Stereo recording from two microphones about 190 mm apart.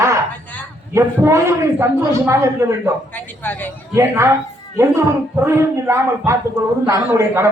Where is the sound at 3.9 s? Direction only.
15° right (ahead or behind).